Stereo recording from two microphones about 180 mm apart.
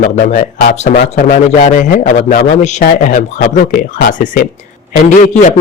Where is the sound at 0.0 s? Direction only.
45° left (ahead or behind).